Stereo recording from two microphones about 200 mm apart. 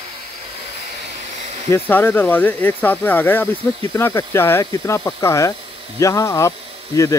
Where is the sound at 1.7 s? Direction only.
10° left (ahead or behind).